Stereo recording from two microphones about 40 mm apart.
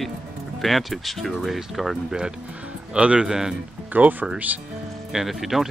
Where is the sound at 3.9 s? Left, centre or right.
Right.